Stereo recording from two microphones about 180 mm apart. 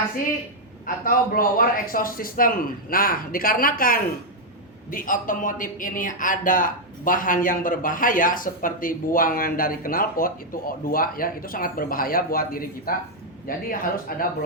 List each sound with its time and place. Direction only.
0.9 s a man's voice: 50° left (ahead or behind)